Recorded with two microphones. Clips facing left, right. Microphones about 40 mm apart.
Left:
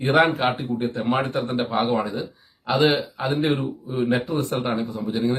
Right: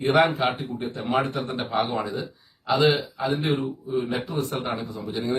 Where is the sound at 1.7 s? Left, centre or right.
Left.